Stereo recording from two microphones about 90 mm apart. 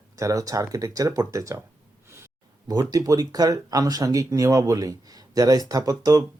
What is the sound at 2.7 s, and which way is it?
Speech, 45° right (ahead or behind).